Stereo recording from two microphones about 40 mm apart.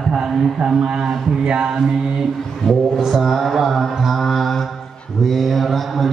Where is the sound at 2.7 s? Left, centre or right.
Centre.